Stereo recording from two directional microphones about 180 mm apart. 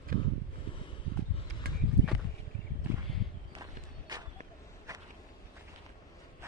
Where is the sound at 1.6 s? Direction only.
60° right (ahead or behind).